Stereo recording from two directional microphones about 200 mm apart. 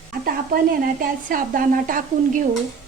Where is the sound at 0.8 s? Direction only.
45° right (ahead or behind).